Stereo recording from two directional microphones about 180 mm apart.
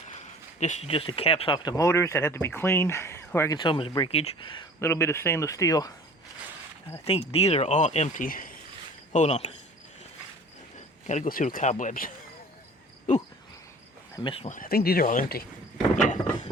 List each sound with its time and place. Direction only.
0.6 s speech: 35° left (ahead or behind); by 3.6 s 15° left (ahead or behind)
3.6 s speech: 30° left (ahead or behind)
4.8 s speech: 15° left (ahead or behind)
7.0 s speech: 35° left (ahead or behind); by 8.5 s 50° left (ahead or behind)
9.1 s speech: 40° left (ahead or behind)
11.0 s speech: 45° left (ahead or behind)
14.2 s speech: 30° left (ahead or behind)
14.5 s speech: 55° left (ahead or behind)